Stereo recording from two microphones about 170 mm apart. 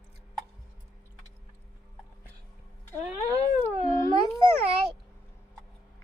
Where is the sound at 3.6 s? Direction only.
10° left (ahead or behind).